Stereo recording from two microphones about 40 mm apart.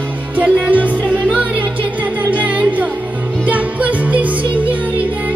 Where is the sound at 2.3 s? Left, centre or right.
Right.